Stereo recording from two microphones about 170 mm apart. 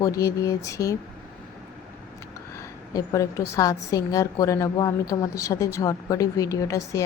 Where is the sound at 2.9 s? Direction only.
20° left (ahead or behind).